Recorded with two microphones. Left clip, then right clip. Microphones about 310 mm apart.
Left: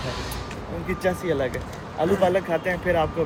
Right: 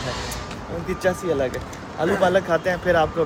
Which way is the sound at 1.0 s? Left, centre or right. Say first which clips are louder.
Right 2 dB; centre.